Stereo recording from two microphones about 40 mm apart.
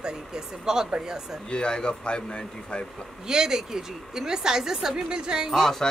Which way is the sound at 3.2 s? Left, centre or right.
Centre.